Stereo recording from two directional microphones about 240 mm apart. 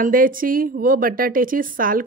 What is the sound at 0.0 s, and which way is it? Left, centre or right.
A woman's voice, right.